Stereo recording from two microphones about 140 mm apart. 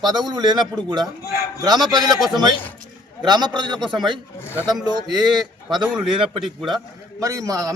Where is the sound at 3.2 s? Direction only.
30° right (ahead or behind).